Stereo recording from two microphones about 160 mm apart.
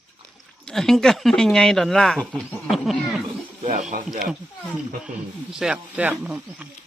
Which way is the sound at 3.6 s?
55° right (ahead or behind).